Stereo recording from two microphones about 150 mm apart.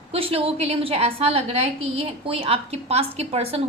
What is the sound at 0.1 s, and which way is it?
A woman's voice, 40° right (ahead or behind).